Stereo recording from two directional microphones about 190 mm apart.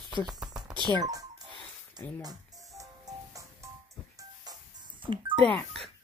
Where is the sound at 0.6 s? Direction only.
25° right (ahead or behind).